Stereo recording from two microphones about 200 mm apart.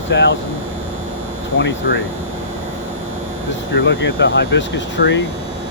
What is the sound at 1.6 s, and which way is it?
Speech, 65° left (ahead or behind).